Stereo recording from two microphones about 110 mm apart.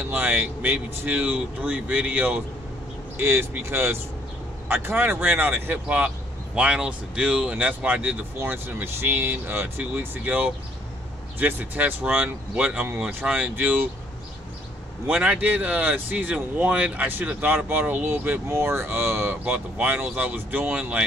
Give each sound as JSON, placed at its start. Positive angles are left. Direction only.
{"t": 0.1, "sound": "speech", "side_deg": -15}
{"t": 15.0, "sound": "speech", "side_deg": -15}